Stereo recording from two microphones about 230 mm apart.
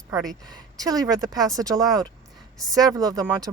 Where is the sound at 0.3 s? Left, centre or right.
Centre.